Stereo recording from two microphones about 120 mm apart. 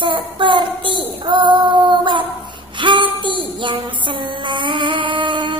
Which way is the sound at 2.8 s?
45° right (ahead or behind).